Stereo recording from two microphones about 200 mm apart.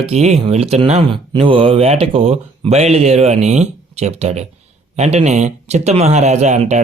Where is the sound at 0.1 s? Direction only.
30° right (ahead or behind).